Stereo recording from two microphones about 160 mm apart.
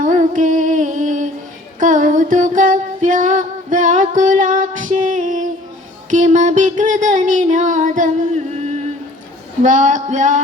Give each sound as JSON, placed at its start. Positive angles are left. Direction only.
{"t": 0.0, "sound": "music", "side_deg": -50}
{"t": 6.1, "sound": "a sound", "side_deg": -50}
{"t": 9.6, "sound": "music", "side_deg": -50}